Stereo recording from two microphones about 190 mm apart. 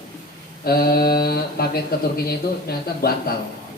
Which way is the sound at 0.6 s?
55° left (ahead or behind).